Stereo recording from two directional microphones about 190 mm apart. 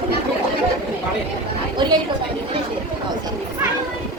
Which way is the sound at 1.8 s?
25° right (ahead or behind).